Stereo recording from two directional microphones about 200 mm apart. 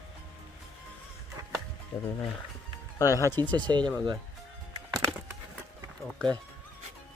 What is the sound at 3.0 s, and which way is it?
Speech, 15° left (ahead or behind).